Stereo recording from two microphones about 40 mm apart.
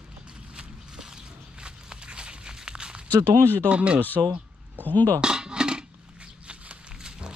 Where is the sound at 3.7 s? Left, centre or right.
Right.